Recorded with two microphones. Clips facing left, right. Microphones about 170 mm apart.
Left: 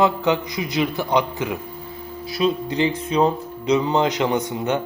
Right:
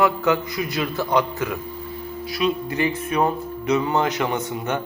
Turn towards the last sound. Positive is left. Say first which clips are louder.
# left 3 dB
turn(degrees=15)  # may be behind; listen again after turning